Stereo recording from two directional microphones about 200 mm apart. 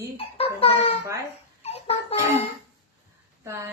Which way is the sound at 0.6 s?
30° left (ahead or behind).